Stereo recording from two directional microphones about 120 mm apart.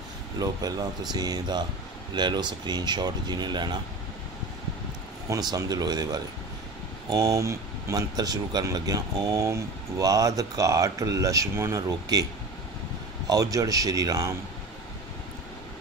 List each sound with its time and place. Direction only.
0.4 s speech: 30° right (ahead or behind)
5.3 s speech: 30° right (ahead or behind)
13.3 s speech: 30° right (ahead or behind)